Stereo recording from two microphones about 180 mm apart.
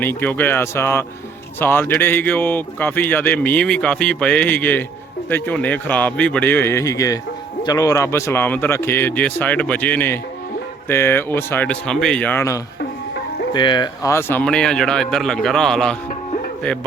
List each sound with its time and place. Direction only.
0.0 s a man's voice: 10° left (ahead or behind)
13.5 s speech: 25° left (ahead or behind); by 16.0 s 5° left (ahead or behind)
16.0 s music: 45° left (ahead or behind)